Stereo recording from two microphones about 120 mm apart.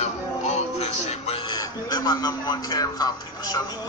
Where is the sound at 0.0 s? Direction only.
65° left (ahead or behind).